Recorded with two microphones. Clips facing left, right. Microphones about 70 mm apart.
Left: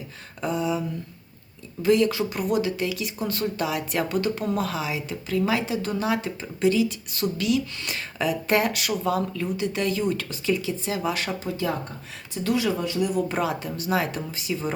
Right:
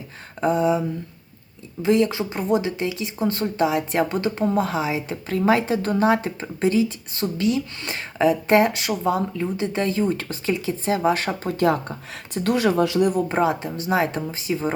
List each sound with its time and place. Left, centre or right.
0.4 s speech: right
11.5 s speech: right
13.2 s speech: right